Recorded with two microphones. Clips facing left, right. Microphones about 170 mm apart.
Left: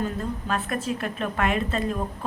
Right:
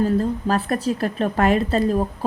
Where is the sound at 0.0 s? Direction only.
35° right (ahead or behind).